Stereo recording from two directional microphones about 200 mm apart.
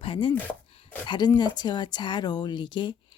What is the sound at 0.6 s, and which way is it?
Chopping, 30° left (ahead or behind).